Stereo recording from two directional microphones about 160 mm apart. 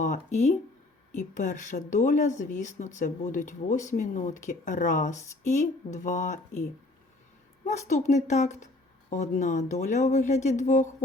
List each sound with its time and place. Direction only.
0.0 s speech: 45° left (ahead or behind)
7.6 s speech: 50° left (ahead or behind)